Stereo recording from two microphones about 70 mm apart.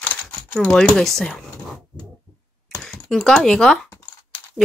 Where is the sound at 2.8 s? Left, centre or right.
Centre.